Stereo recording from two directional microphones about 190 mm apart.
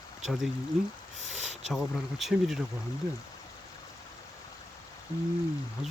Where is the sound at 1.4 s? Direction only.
35° right (ahead or behind).